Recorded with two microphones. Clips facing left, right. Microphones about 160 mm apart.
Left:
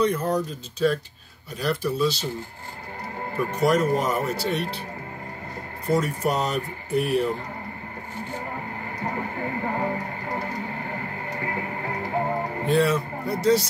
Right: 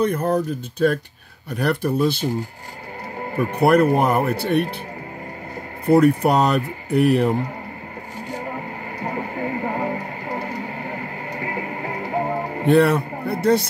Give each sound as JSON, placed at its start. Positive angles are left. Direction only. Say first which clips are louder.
{"t": 0.0, "sound": "speech", "louder": "right 3 dB", "side_deg": -55}
{"t": 3.5, "sound": "speech", "louder": "right 6 dB", "side_deg": -60}
{"t": 5.9, "sound": "speech", "louder": "right 9 dB", "side_deg": -65}
{"t": 9.0, "sound": "vehicle", "louder": "right 3 dB", "side_deg": -15}
{"t": 12.6, "sound": "a man's voice", "louder": "right 6 dB", "side_deg": -65}